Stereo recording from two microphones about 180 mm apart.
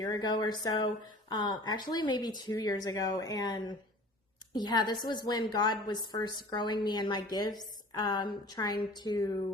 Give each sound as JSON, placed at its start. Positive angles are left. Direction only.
{"t": 0.0, "sound": "a woman's voice", "side_deg": 20}